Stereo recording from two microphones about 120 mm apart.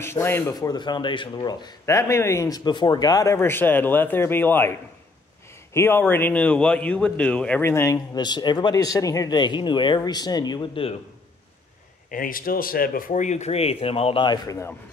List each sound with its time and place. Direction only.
0.0 s speech: 20° left (ahead or behind); by 1.8 s 35° left (ahead or behind)
1.9 s speech: 25° left (ahead or behind)
7.6 s speech: 20° left (ahead or behind); by 11.0 s 50° left (ahead or behind)
13.1 s speech: 80° left; by 14.2 s 55° left (ahead or behind)
14.2 s speech: 35° left (ahead or behind)